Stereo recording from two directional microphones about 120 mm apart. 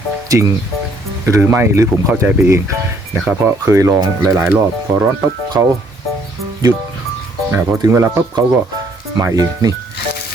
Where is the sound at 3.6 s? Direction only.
25° right (ahead or behind).